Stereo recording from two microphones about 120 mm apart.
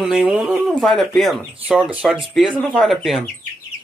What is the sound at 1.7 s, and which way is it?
Speech, 10° right (ahead or behind).